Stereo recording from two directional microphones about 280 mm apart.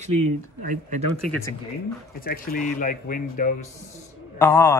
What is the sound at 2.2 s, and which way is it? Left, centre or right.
Speech, left.